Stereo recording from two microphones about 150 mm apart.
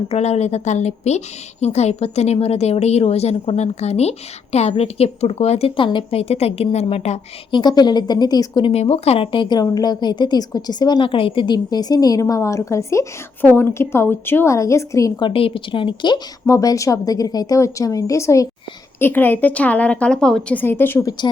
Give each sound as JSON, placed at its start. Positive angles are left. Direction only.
{"t": 0.1, "sound": "a woman's voice", "side_deg": 45}
{"t": 7.5, "sound": "a woman's voice", "side_deg": 30}
{"t": 8.7, "sound": "a woman's voice", "side_deg": 45}